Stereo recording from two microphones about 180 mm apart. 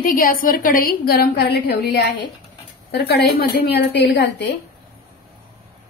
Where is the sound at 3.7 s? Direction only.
75° left (ahead or behind).